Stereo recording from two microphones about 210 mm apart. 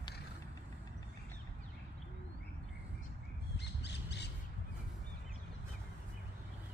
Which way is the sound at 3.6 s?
55° left (ahead or behind).